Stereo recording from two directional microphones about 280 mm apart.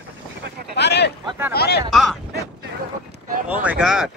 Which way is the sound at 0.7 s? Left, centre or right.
Left.